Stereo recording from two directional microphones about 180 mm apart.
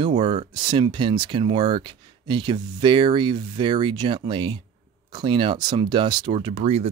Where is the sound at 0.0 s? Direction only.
25° right (ahead or behind).